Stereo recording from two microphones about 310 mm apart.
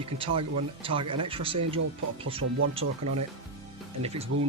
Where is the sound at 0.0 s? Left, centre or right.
Centre.